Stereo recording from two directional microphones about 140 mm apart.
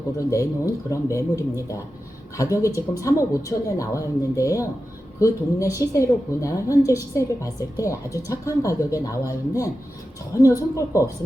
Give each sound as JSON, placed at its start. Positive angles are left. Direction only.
{"t": 0.2, "sound": "a woman's voice", "side_deg": 20}